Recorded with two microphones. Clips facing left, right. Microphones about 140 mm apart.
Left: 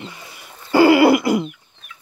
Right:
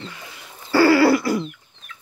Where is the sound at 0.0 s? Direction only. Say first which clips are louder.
Left 1 dB; 15° left (ahead or behind).